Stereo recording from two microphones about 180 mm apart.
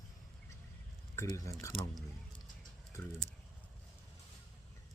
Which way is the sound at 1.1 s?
15° left (ahead or behind).